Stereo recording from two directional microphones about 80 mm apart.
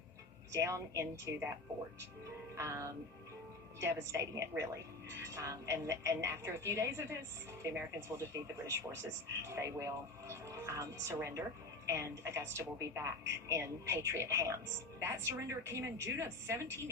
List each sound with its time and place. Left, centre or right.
0.5 s a woman's voice: right
2.6 s a woman's voice: right